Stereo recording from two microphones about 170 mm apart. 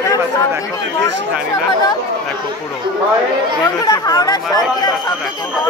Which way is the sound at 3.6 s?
20° left (ahead or behind).